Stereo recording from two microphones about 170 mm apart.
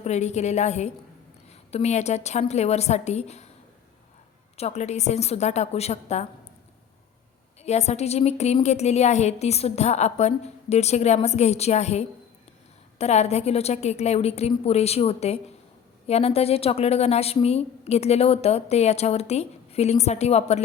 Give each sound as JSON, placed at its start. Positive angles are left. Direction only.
{"t": 0.0, "sound": "a woman's voice", "side_deg": 40}
{"t": 4.5, "sound": "a woman's voice", "side_deg": 40}
{"t": 7.6, "sound": "a woman's voice", "side_deg": 40}